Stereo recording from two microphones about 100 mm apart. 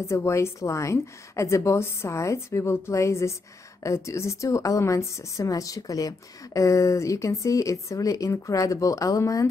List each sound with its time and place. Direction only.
0.0 s a woman's voice: 25° left (ahead or behind)